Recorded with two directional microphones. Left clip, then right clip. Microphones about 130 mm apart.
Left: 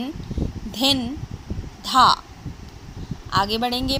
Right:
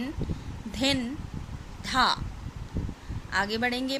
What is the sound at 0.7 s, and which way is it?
A woman's voice, 15° left (ahead or behind).